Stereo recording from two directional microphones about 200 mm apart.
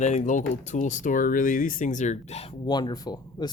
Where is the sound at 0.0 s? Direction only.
35° left (ahead or behind).